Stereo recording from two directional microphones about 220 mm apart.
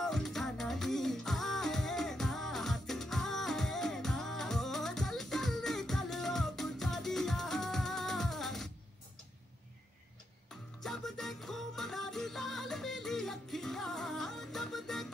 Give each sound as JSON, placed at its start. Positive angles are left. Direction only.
{"t": 0.0, "sound": "music", "side_deg": 0}
{"t": 10.8, "sound": "music", "side_deg": 0}